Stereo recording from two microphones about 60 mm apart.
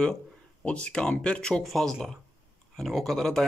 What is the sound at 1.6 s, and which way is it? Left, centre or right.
Speech, centre.